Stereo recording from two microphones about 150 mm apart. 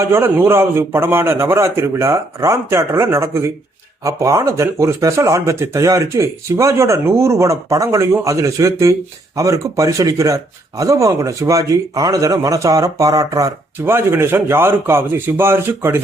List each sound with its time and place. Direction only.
0.0 s a man's voice: 15° right (ahead or behind)